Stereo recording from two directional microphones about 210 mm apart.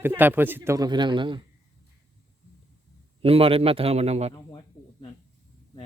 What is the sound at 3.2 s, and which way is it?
A man's voice, 25° right (ahead or behind).